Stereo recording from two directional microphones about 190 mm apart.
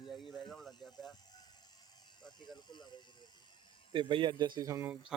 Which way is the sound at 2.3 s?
20° left (ahead or behind).